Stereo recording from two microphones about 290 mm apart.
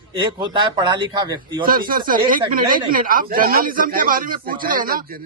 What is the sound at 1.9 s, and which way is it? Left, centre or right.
Speech, right.